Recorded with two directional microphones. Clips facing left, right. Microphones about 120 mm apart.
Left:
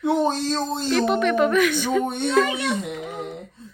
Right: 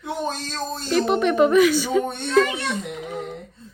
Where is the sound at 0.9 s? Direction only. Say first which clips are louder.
Right 1 dB; 5° right (ahead or behind).